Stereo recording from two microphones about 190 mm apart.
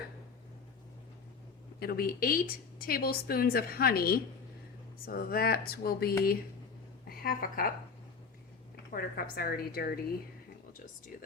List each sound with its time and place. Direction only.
1.8 s a woman's voice: 50° left (ahead or behind)
8.7 s a woman's voice: 55° left (ahead or behind)
11.1 s a woman's voice: 50° left (ahead or behind)